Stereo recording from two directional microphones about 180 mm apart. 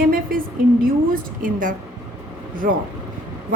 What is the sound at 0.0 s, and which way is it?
A woman's voice, 55° right (ahead or behind).